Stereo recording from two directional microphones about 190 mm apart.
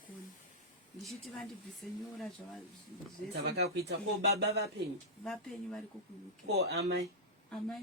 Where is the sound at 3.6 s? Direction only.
60° right (ahead or behind).